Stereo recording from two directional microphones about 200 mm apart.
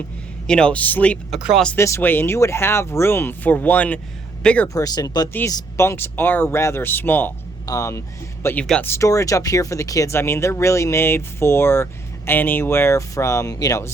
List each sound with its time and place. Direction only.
0.4 s speech: 5° left (ahead or behind)